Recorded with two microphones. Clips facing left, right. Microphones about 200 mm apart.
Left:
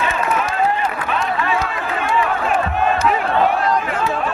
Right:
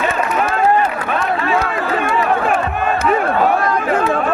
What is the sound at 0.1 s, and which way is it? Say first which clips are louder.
Run: right 3 dB; 60° right (ahead or behind).